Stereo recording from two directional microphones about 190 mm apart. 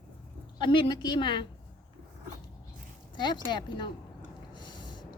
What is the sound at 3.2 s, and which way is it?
Speech, 25° left (ahead or behind).